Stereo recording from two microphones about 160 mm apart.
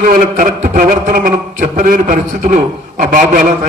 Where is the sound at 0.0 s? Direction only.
55° right (ahead or behind).